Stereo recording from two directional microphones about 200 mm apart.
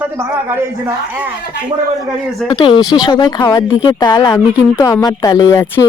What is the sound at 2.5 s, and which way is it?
Speech, 20° left (ahead or behind).